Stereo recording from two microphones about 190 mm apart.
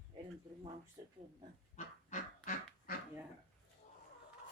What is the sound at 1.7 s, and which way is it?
Dog, 40° left (ahead or behind).